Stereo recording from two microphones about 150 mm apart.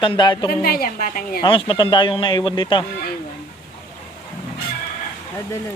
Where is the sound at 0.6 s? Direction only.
80° left.